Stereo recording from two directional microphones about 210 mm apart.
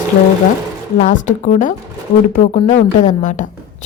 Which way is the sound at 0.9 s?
35° left (ahead or behind).